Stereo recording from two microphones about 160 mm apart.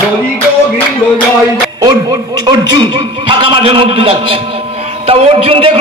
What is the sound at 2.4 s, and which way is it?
A man's voice, 25° right (ahead or behind).